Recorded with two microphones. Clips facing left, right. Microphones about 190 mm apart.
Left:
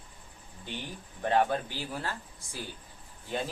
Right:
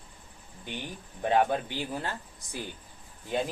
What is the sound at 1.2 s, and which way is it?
Speech, 15° right (ahead or behind).